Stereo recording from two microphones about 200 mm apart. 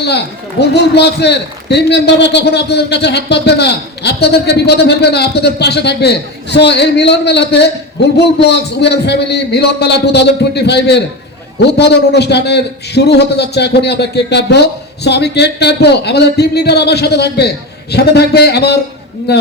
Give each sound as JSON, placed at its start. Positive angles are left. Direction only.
{"t": 0.6, "sound": "a man's voice", "side_deg": 55}